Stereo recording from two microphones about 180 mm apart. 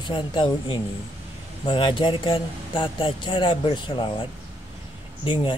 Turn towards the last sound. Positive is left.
turn(degrees=25)  # may be behind; listen again after turning